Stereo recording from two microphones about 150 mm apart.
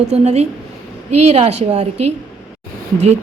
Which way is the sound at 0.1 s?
45° right (ahead or behind).